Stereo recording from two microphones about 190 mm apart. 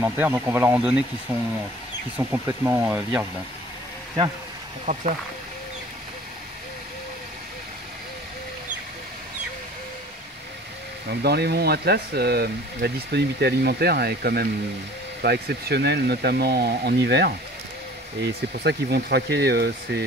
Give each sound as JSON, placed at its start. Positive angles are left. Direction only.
{"t": 0.0, "sound": "speech", "side_deg": -10}
{"t": 4.9, "sound": "speech", "side_deg": -45}
{"t": 11.1, "sound": "speech", "side_deg": -55}
{"t": 18.5, "sound": "speech", "side_deg": -60}